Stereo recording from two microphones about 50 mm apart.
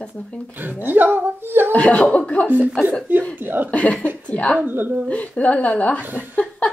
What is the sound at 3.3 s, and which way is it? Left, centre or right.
Speech, right.